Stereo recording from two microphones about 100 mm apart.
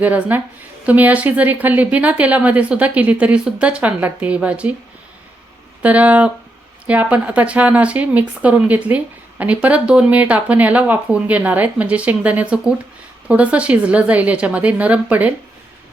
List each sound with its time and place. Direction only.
0.0 s speech: 15° right (ahead or behind)
5.8 s speech: 15° right (ahead or behind)